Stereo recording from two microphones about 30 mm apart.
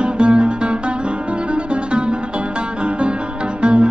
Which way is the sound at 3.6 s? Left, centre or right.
Right.